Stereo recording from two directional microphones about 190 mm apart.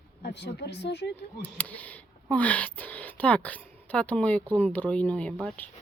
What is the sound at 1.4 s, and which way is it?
A woman's voice, 10° left (ahead or behind).